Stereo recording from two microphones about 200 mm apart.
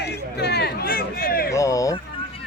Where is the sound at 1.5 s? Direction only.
15° left (ahead or behind).